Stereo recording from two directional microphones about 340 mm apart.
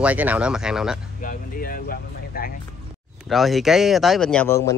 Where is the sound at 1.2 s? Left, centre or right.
Left.